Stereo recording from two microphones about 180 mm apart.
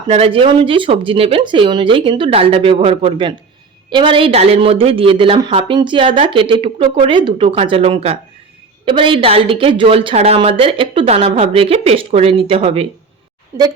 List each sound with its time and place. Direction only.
0.1 s a woman's voice: 30° right (ahead or behind)
13.5 s a woman's voice: 15° right (ahead or behind)